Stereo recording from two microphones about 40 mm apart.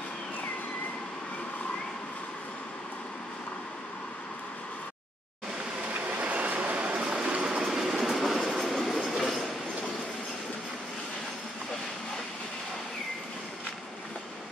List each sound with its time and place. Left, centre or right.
5.9 s train: right
7.6 s train: centre